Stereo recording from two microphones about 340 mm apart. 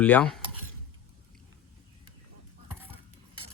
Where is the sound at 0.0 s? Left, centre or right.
Centre.